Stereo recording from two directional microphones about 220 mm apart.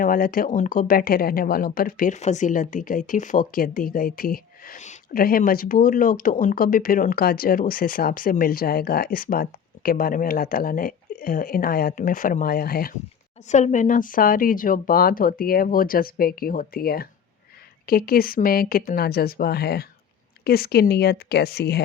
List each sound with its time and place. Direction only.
0.0 s speech: 40° left (ahead or behind)